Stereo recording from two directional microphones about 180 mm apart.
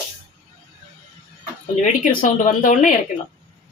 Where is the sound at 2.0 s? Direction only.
50° left (ahead or behind).